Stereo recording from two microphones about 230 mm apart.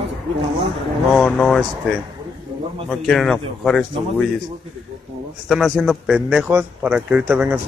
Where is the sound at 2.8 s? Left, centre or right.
Centre.